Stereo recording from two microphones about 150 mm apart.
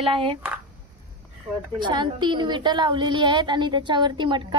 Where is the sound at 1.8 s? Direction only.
30° right (ahead or behind).